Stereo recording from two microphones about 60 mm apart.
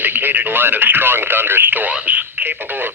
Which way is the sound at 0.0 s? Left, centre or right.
Right.